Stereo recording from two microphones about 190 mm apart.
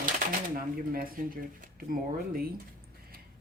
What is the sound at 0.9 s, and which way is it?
Speech, 50° right (ahead or behind).